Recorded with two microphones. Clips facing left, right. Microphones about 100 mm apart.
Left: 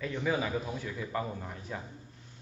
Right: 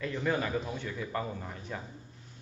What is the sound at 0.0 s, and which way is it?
Speech, centre (ahead or behind).